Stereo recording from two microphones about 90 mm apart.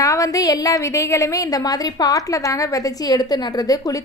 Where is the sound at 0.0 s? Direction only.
40° left (ahead or behind).